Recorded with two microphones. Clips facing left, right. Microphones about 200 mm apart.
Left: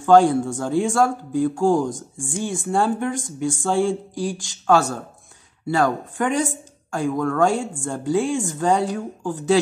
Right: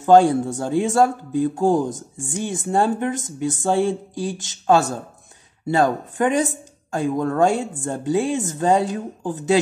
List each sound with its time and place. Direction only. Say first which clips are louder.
0.0 s speech: right 1 dB; 15° right (ahead or behind)